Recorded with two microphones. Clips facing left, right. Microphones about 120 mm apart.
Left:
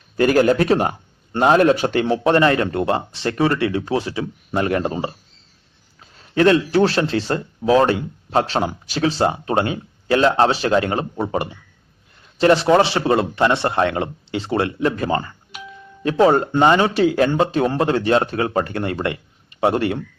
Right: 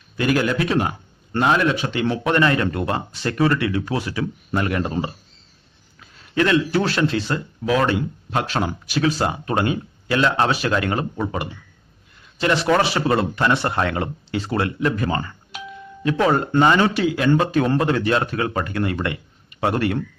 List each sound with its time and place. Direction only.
0.2 s speech: 40° left (ahead or behind)
2.1 s speech: 30° left (ahead or behind)
6.0 s speech: 35° left (ahead or behind)